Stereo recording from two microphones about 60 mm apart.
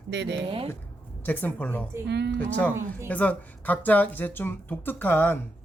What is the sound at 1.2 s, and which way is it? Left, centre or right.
Speech, left.